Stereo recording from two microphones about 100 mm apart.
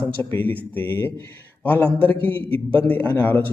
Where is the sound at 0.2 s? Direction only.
20° left (ahead or behind).